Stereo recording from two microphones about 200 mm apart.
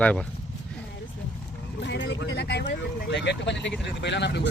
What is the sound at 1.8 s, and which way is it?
Vehicle, 60° left (ahead or behind).